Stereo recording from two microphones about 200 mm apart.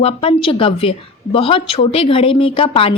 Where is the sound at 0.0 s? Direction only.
30° left (ahead or behind).